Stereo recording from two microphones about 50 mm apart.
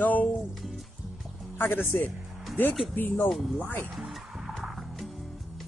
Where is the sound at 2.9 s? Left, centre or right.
Left.